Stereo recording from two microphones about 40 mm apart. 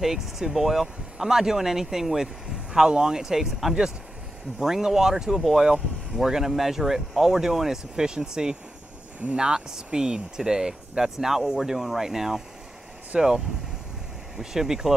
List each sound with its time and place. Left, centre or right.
0.0 s speech: centre
13.1 s speech: right
14.3 s speech: centre